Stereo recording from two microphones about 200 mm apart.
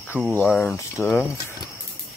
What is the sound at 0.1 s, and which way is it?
Speech, 10° right (ahead or behind).